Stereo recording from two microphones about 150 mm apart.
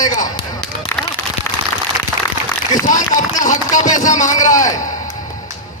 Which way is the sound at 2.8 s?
60° left (ahead or behind).